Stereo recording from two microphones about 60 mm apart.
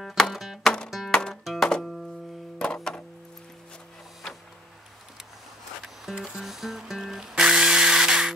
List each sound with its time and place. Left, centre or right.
0.0 s music: centre
1.1 s music: centre
1.4 s music: centre
6.3 s music: centre